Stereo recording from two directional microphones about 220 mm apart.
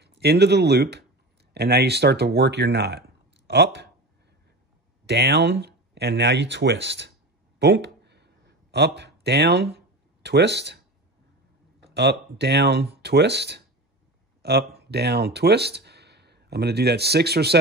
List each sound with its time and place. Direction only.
0.0 s speech: 50° right (ahead or behind)
5.0 s speech: 50° right (ahead or behind)
7.5 s a sound: 50° right (ahead or behind)
8.7 s speech: 50° right (ahead or behind)
11.9 s speech: 50° right (ahead or behind)